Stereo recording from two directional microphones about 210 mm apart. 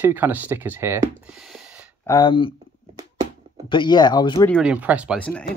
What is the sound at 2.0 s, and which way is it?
Speech, 20° left (ahead or behind).